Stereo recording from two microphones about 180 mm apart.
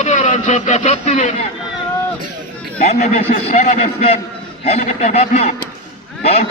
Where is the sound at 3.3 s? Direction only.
45° left (ahead or behind).